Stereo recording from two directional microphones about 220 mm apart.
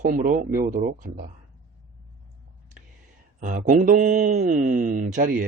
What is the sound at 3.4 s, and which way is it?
Speech, 35° right (ahead or behind).